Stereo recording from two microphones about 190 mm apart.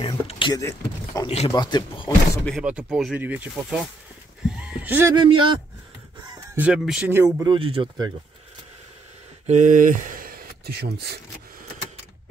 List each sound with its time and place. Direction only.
0.0 s power windows: 25° left (ahead or behind)
0.6 s speech: 15° left (ahead or behind)
2.6 s speech: 5° right (ahead or behind)
4.5 s a sound: 5° right (ahead or behind)
5.1 s speech: 25° right (ahead or behind)
6.5 s speech: 5° right (ahead or behind)
7.4 s speech: 25° right (ahead or behind)
9.5 s speech: 40° right (ahead or behind); by 11.1 s 55° right (ahead or behind)